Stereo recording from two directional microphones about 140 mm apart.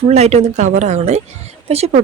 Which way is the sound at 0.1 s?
50° right (ahead or behind).